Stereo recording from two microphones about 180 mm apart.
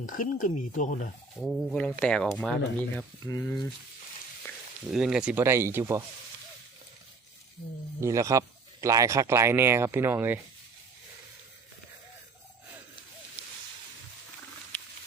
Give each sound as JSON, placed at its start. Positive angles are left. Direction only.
{"t": 0.0, "sound": "speech", "side_deg": 50}
{"t": 1.4, "sound": "speech", "side_deg": 5}
{"t": 3.2, "sound": "speech", "side_deg": 20}
{"t": 4.9, "sound": "a man's voice", "side_deg": -5}
{"t": 8.0, "sound": "a man's voice", "side_deg": -15}
{"t": 14.7, "sound": "a sound", "side_deg": 5}